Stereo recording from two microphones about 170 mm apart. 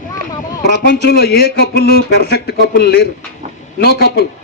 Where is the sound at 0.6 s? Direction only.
70° left (ahead or behind).